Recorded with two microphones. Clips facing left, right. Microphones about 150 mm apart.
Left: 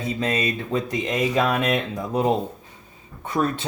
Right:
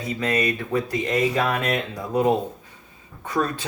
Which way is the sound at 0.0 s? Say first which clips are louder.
Even; 25° left (ahead or behind).